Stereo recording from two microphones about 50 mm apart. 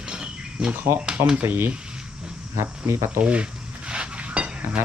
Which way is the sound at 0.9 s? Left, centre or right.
Right.